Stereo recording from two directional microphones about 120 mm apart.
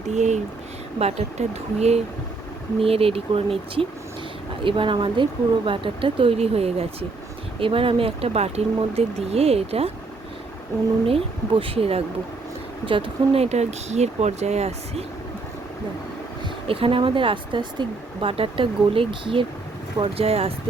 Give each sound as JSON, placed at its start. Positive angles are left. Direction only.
{"t": 0.1, "sound": "speech", "side_deg": -70}
{"t": 2.8, "sound": "speech", "side_deg": -55}
{"t": 11.0, "sound": "speech", "side_deg": -50}
{"t": 16.6, "sound": "speech", "side_deg": -50}